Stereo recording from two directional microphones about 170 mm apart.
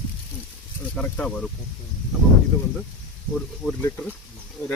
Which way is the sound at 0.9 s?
5° left (ahead or behind).